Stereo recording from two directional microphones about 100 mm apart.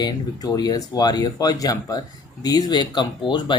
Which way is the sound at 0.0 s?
40° left (ahead or behind).